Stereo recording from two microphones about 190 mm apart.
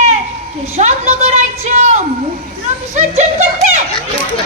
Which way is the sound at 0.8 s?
35° right (ahead or behind).